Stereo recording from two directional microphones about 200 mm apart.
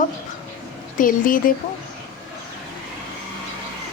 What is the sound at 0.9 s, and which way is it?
Speech, 45° left (ahead or behind).